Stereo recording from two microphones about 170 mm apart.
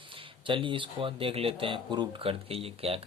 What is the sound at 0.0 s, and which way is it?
Speech, 30° right (ahead or behind).